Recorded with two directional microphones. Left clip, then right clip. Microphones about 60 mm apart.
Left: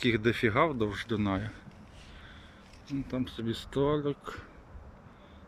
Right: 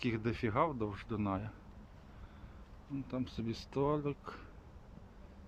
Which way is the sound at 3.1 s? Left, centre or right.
Right.